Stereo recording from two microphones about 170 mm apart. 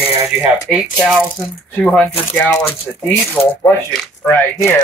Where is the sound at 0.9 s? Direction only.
5° right (ahead or behind).